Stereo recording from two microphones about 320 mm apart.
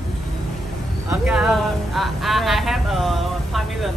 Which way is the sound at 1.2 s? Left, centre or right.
Centre.